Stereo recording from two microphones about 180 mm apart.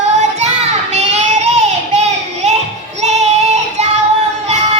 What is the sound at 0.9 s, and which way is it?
Child singing, 40° right (ahead or behind).